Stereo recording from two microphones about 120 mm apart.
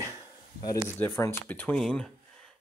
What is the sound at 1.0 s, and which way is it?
Speech, 15° left (ahead or behind).